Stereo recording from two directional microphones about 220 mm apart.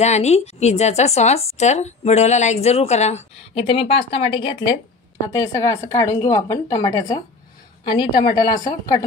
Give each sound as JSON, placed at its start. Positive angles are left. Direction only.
{"t": 0.0, "sound": "a woman's voice", "side_deg": 30}